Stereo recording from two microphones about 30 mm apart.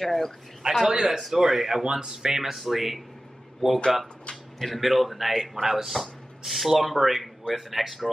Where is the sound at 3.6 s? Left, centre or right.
Centre.